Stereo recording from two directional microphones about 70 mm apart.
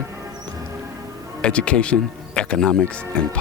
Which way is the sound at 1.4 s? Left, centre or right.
Centre.